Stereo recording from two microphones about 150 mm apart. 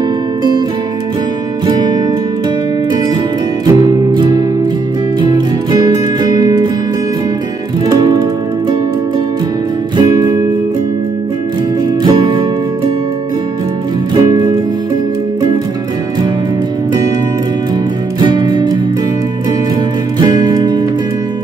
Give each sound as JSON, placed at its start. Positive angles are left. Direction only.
{"t": 1.7, "sound": "music", "side_deg": -30}
{"t": 3.8, "sound": "music", "side_deg": -30}
{"t": 7.9, "sound": "music", "side_deg": -30}
{"t": 9.9, "sound": "music", "side_deg": -25}
{"t": 12.0, "sound": "music", "side_deg": -30}
{"t": 14.1, "sound": "music", "side_deg": -30}
{"t": 18.2, "sound": "music", "side_deg": -30}
{"t": 20.2, "sound": "music", "side_deg": -30}